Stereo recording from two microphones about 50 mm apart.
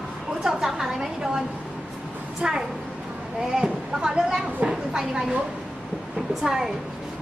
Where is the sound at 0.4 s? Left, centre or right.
Centre.